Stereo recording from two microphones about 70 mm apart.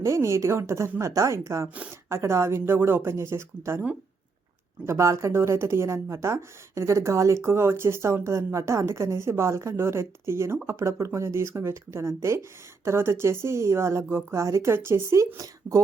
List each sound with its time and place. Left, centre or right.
0.0 s a woman's voice: right
4.9 s a woman's voice: right